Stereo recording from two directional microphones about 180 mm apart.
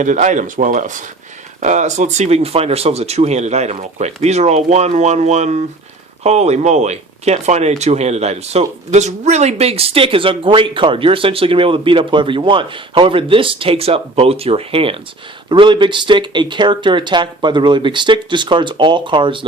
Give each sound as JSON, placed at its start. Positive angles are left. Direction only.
{"t": 0.0, "sound": "speech", "side_deg": -45}